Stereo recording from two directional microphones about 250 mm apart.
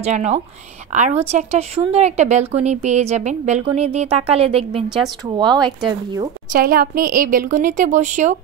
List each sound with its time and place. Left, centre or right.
0.0 s speech: right
4.8 s a woman's voice: centre
5.3 s speech: centre
6.5 s speech: right